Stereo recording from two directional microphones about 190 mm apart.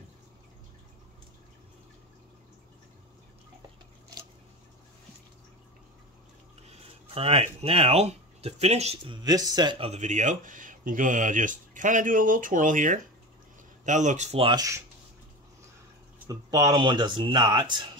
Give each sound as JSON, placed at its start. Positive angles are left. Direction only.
{"t": 7.2, "sound": "speech", "side_deg": -30}
{"t": 16.3, "sound": "speech", "side_deg": -20}